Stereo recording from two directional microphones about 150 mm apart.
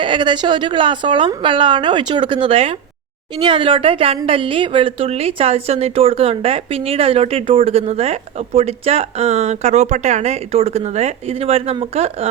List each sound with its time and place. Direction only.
0.0 s a woman's voice: 35° right (ahead or behind)